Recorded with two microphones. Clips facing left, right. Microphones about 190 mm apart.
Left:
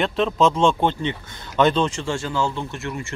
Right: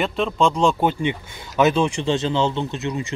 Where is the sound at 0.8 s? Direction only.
10° right (ahead or behind).